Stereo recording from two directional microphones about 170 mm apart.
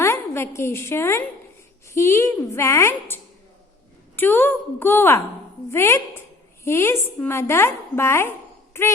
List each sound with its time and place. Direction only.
0.0 s a woman's voice: 15° left (ahead or behind)